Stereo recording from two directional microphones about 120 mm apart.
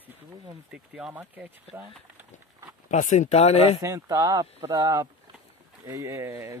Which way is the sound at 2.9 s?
90° left.